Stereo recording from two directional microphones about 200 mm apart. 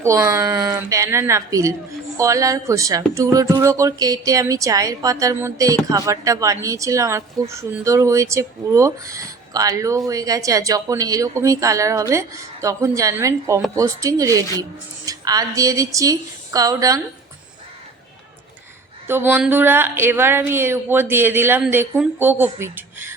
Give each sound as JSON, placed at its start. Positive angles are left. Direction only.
{"t": 0.0, "sound": "speech", "side_deg": -15}
{"t": 19.0, "sound": "speech", "side_deg": -10}